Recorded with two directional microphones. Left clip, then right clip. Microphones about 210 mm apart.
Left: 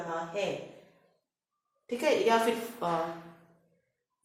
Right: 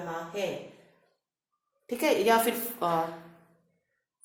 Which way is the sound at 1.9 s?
50° right (ahead or behind).